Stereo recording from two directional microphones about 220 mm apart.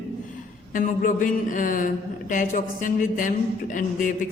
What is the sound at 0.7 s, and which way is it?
A woman's voice, 35° left (ahead or behind).